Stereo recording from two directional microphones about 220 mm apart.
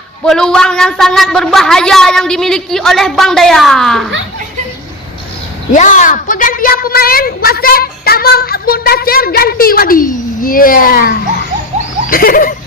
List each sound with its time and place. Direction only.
0.3 s a woman's voice: 5° left (ahead or behind)
5.7 s a woman's voice: 35° left (ahead or behind)